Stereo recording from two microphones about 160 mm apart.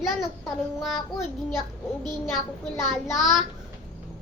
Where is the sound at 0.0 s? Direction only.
Centre (ahead or behind).